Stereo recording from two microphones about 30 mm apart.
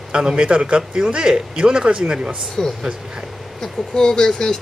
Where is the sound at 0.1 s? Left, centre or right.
Right.